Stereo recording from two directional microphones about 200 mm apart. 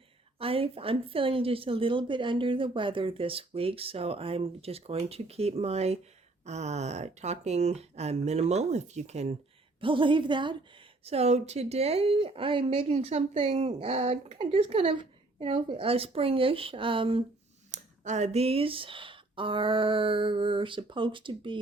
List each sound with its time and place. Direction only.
0.3 s a woman's voice: 30° right (ahead or behind)